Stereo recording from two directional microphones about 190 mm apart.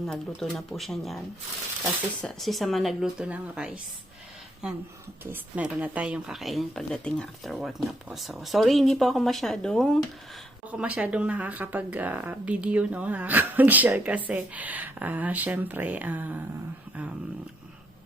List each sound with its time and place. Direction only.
0.0 s speech: centre (ahead or behind)
2.2 s speech: centre (ahead or behind)
5.2 s speech: 10° right (ahead or behind)